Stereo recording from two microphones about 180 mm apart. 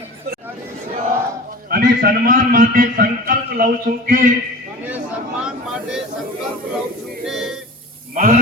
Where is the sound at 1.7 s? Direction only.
55° right (ahead or behind).